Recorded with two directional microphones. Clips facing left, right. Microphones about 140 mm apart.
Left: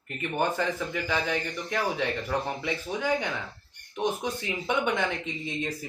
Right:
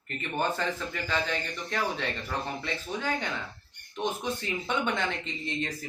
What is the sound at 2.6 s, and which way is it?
Speech, 15° left (ahead or behind).